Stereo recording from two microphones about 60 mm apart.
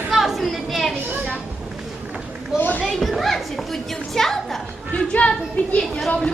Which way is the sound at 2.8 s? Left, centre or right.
Centre.